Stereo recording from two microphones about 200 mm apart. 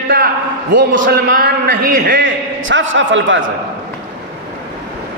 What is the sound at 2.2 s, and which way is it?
A man's voice, 70° right (ahead or behind).